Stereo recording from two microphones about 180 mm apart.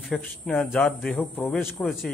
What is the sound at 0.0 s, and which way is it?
Speech, centre (ahead or behind).